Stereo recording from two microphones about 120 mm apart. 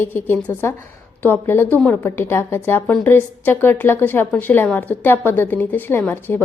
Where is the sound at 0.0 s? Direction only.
15° left (ahead or behind).